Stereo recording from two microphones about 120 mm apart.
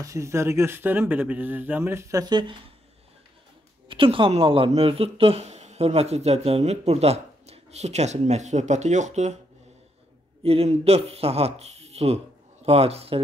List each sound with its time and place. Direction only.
0.0 s speech: 25° right (ahead or behind)
2.2 s speech: 40° right (ahead or behind)
3.9 s speech: 45° right (ahead or behind); by 9.4 s 85° right
10.4 s speech: 55° right (ahead or behind)